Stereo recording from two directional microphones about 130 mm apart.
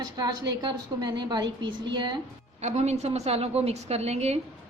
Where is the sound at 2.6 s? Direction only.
60° right (ahead or behind).